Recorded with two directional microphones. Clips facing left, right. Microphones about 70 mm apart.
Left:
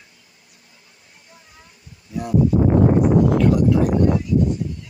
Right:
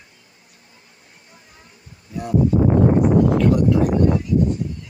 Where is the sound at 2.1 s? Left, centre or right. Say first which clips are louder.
Left 1 dB; centre.